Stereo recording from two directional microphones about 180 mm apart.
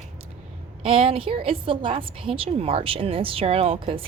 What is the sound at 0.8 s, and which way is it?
A woman's voice, 30° right (ahead or behind).